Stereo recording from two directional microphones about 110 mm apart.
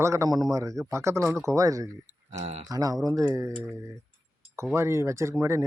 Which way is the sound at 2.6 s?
35° right (ahead or behind).